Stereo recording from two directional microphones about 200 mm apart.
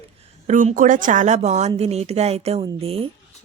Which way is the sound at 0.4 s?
40° right (ahead or behind).